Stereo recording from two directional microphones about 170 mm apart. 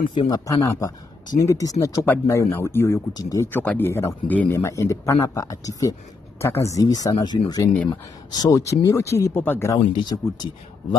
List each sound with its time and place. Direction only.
0.1 s speech: 30° left (ahead or behind)
0.5 s speech: 20° left (ahead or behind)
7.7 s speech: 10° left (ahead or behind)
8.3 s speech: 20° left (ahead or behind)
9.8 s speech: 25° left (ahead or behind)